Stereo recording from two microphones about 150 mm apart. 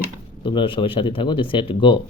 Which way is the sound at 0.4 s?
35° left (ahead or behind).